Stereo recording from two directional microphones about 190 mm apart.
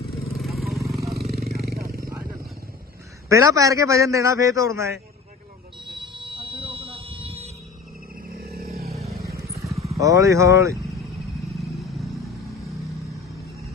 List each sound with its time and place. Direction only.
0.3 s vehicle: centre (ahead or behind)
1.3 s vehicle: 55° right (ahead or behind)
3.2 s a man's voice: 15° right (ahead or behind)
6.0 s buzzer: 25° right (ahead or behind)
8.3 s a sound: 55° right (ahead or behind)
9.0 s vehicle: centre (ahead or behind)
9.5 s vehicle: 15° right (ahead or behind)
9.9 s a man's voice: 15° right (ahead or behind)
11.5 s vehicle: centre (ahead or behind)